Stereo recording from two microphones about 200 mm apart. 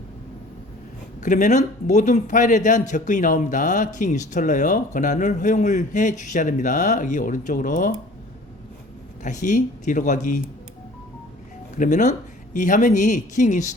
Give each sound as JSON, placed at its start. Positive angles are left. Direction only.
{"t": 1.2, "sound": "a man's voice", "side_deg": 40}
{"t": 9.2, "sound": "a man's voice", "side_deg": 40}
{"t": 11.8, "sound": "a man's voice", "side_deg": 40}